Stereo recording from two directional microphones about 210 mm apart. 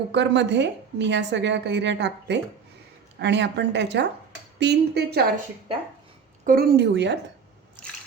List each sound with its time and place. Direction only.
0.1 s a woman's voice: 55° right (ahead or behind)
6.4 s speech: 45° right (ahead or behind)